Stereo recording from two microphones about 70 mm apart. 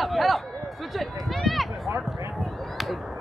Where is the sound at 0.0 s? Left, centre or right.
Centre.